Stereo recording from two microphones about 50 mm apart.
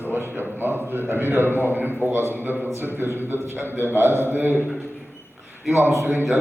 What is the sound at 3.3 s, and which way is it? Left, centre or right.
A man's voice, right.